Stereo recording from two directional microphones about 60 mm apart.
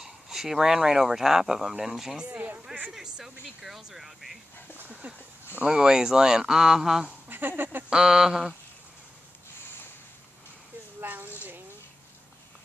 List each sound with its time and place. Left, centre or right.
0.0 s speech: centre
2.2 s speech: right
2.9 s speech: centre
4.7 s speech: right
5.6 s speech: centre
7.2 s speech: right
7.9 s speech: centre
11.0 s a woman's voice: right